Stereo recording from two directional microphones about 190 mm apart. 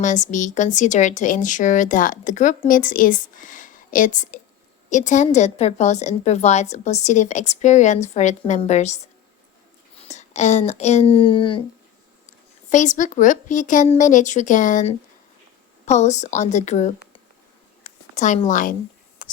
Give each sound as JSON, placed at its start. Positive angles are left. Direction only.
{"t": 0.0, "sound": "a woman's voice", "side_deg": 40}
{"t": 10.1, "sound": "speech", "side_deg": 40}
{"t": 12.7, "sound": "a woman's voice", "side_deg": 40}
{"t": 17.8, "sound": "a sound", "side_deg": 40}
{"t": 19.2, "sound": "whispering", "side_deg": 45}